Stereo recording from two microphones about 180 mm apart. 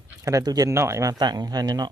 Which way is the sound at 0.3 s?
20° right (ahead or behind).